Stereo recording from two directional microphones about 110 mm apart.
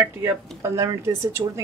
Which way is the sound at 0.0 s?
20° right (ahead or behind).